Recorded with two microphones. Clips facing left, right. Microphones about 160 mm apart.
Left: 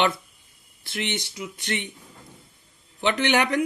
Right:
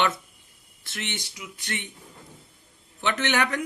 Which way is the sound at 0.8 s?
15° left (ahead or behind).